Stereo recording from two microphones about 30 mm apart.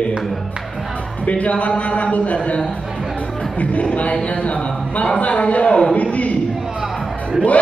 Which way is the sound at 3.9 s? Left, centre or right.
Left.